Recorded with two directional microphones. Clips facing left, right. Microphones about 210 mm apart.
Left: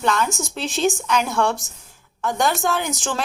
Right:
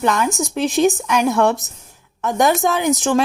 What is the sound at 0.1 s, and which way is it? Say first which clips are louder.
A woman's voice: right 3 dB; 15° right (ahead or behind).